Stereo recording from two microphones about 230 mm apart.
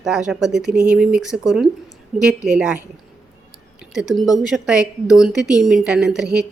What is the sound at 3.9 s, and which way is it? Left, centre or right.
A woman's voice, centre.